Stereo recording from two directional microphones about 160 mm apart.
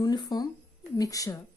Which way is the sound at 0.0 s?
25° left (ahead or behind).